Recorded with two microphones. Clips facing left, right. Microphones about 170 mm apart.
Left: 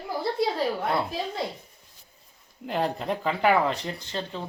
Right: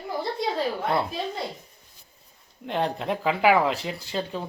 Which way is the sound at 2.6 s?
Centre (ahead or behind).